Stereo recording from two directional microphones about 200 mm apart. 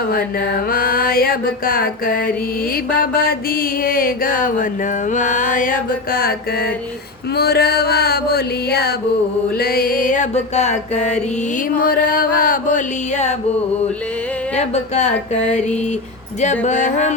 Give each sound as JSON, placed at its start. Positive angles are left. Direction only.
{"t": 0.1, "sound": "mantra", "side_deg": 45}
{"t": 9.6, "sound": "music", "side_deg": 50}
{"t": 11.8, "sound": "mantra", "side_deg": 45}
{"t": 14.5, "sound": "music", "side_deg": 35}